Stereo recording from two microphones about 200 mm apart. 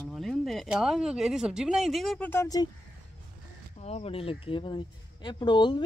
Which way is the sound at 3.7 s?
30° left (ahead or behind).